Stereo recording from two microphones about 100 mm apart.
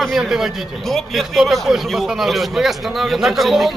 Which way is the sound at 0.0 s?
Centre (ahead or behind).